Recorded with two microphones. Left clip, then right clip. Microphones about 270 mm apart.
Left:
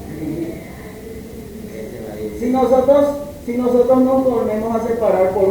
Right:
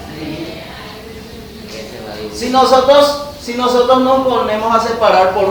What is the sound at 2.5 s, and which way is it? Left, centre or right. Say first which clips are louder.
Speech: right 5 dB; right.